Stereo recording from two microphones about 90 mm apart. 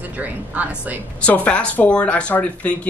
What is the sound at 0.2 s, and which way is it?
Speech, 15° right (ahead or behind).